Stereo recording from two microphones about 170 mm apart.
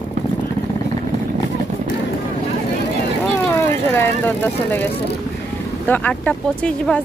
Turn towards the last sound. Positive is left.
turn(degrees=5)  # may be behind; listen again after turning